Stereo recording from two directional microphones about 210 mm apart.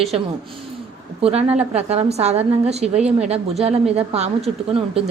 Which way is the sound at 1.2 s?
30° right (ahead or behind).